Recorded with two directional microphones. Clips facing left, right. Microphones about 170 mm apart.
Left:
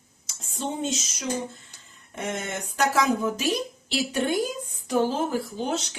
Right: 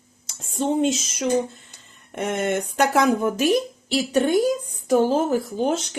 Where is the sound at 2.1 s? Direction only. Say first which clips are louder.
Right 8 dB; 60° right (ahead or behind).